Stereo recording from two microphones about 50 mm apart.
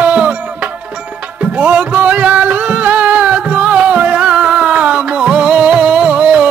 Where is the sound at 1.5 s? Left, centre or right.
Right.